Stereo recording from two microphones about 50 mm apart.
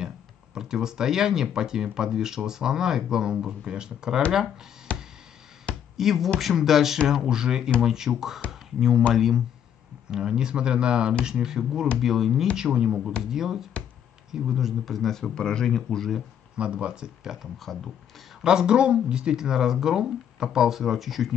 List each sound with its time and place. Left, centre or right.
0.6 s speech: centre
4.9 s a sound: left
5.9 s speech: centre
10.0 s speech: centre
16.5 s speech: right
17.6 s speech: centre
18.4 s speech: centre